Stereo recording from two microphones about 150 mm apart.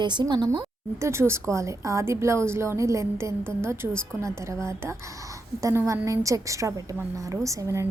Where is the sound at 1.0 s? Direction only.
20° right (ahead or behind).